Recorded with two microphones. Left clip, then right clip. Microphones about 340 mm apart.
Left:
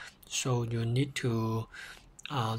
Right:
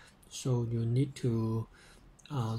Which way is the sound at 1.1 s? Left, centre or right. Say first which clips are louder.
Left 2 dB; left.